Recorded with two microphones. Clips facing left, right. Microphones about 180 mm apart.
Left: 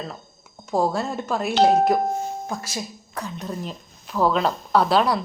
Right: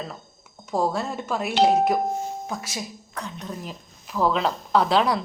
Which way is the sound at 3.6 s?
10° right (ahead or behind).